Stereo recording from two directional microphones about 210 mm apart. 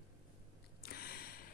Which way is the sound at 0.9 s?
45° left (ahead or behind).